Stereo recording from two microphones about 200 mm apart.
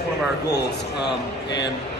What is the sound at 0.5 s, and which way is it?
A man's voice, 60° left (ahead or behind).